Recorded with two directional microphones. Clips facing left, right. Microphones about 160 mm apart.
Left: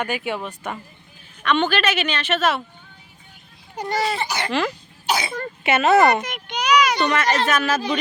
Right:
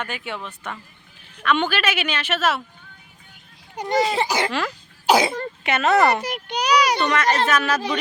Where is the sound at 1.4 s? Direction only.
10° right (ahead or behind).